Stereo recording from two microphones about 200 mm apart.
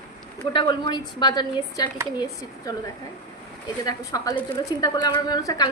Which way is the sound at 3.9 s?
15° left (ahead or behind).